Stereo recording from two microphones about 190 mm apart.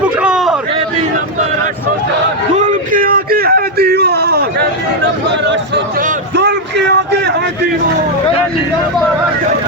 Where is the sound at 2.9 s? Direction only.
50° right (ahead or behind).